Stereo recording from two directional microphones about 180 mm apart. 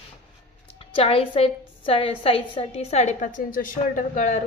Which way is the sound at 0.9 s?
30° left (ahead or behind).